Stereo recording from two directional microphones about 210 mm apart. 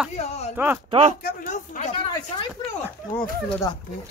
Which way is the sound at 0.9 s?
30° right (ahead or behind).